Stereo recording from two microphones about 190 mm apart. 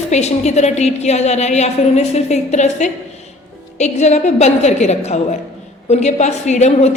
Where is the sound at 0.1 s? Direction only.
35° left (ahead or behind).